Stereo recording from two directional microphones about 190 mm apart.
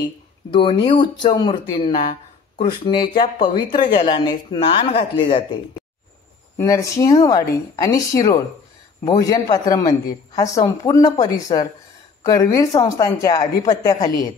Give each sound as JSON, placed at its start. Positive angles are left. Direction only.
{"t": 0.5, "sound": "speech", "side_deg": 25}
{"t": 6.6, "sound": "speech", "side_deg": 15}